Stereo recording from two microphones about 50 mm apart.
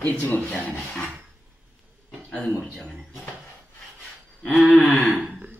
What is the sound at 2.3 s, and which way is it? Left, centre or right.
Speech, centre.